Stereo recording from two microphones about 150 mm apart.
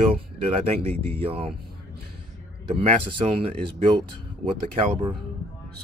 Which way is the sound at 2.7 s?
40° right (ahead or behind).